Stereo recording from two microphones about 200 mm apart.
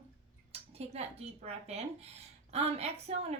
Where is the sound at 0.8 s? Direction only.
30° right (ahead or behind).